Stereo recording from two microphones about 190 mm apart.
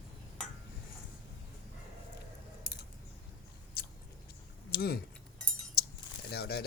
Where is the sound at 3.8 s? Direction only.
55° left (ahead or behind).